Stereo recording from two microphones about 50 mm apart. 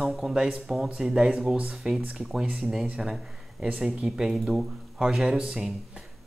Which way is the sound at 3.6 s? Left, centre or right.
Right.